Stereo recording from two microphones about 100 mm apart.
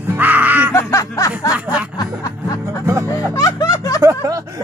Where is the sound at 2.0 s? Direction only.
35° left (ahead or behind).